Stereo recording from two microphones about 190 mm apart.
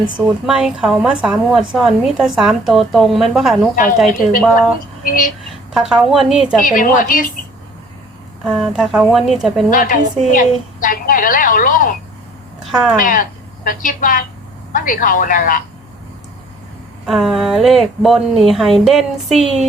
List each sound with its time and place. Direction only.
0.0 s a woman's voice: 5° right (ahead or behind)
5.0 s a woman's voice: 45° left (ahead or behind)
5.7 s a woman's voice: centre (ahead or behind)
6.7 s a woman's voice: 45° left (ahead or behind)
8.4 s a woman's voice: centre (ahead or behind)
9.6 s a woman's voice: 45° left (ahead or behind)
12.6 s a woman's voice: centre (ahead or behind)
13.0 s a woman's voice: 45° left (ahead or behind)
17.1 s a woman's voice: centre (ahead or behind)